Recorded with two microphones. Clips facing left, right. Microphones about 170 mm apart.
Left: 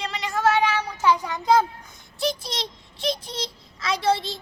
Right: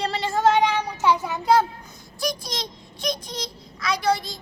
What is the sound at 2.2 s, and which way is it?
A child's voice, 25° left (ahead or behind).